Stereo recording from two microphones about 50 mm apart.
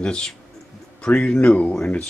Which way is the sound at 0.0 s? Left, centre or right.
Centre.